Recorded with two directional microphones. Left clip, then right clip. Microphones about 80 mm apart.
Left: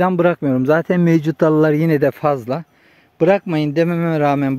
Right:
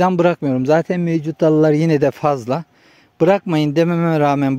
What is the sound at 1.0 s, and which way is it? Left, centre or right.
Speech, left.